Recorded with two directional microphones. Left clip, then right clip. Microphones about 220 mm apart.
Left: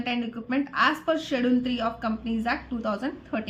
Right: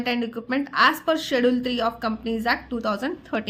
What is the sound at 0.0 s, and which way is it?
Speech, 45° right (ahead or behind).